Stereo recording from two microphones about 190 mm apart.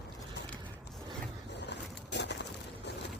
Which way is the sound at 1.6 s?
65° left (ahead or behind).